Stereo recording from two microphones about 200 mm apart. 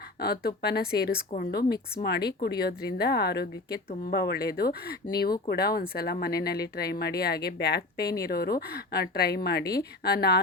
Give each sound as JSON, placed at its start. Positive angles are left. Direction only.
{"t": 0.2, "sound": "speech", "side_deg": 50}